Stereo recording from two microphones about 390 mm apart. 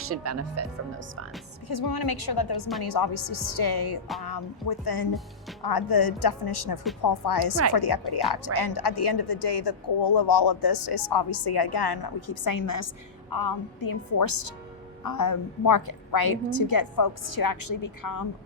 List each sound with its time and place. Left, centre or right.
0.0 s speech: right
1.6 s a woman's voice: left